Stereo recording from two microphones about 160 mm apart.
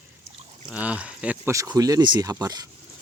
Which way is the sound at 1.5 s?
20° right (ahead or behind).